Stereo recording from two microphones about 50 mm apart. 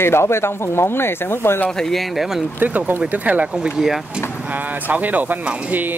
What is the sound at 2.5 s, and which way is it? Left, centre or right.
Speech, right.